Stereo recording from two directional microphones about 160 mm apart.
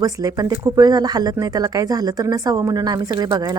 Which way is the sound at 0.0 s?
20° right (ahead or behind).